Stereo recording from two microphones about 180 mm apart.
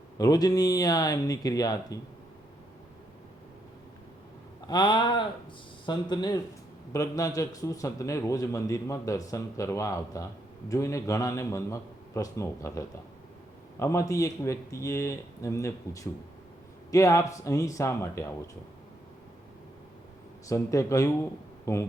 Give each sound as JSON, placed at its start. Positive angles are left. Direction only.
{"t": 0.2, "sound": "speech", "side_deg": 20}
{"t": 4.7, "sound": "a man's voice", "side_deg": 25}
{"t": 20.5, "sound": "a man's voice", "side_deg": 15}